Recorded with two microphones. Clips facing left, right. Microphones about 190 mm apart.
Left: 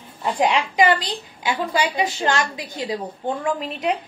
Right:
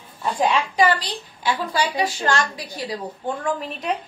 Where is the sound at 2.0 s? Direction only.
20° left (ahead or behind).